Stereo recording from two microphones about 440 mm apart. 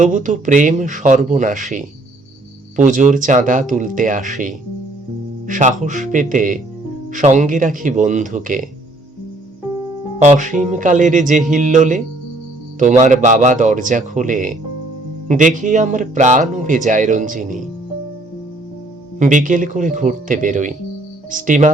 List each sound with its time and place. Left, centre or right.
0.0 s speech: centre
2.7 s speech: centre
10.2 s speech: centre
19.2 s speech: centre